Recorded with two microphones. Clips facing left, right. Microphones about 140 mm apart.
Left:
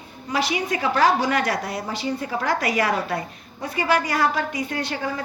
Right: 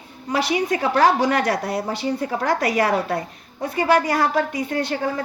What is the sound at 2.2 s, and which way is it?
A woman's voice, 45° right (ahead or behind).